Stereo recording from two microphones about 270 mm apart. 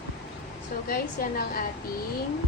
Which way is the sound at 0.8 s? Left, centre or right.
Left.